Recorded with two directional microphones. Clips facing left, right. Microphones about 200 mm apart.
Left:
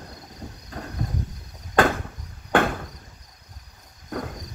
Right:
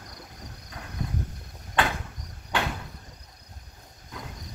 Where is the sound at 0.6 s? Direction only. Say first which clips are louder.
Left 8 dB; 50° left (ahead or behind).